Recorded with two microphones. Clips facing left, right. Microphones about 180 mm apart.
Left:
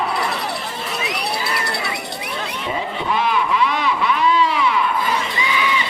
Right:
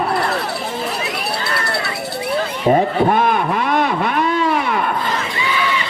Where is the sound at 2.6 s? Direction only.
50° right (ahead or behind).